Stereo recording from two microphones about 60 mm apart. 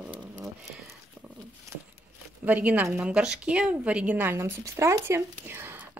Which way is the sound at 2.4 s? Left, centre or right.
Right.